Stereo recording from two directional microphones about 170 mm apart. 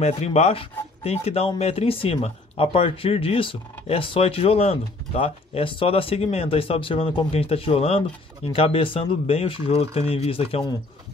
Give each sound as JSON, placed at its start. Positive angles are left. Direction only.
{"t": 0.0, "sound": "speech", "side_deg": 40}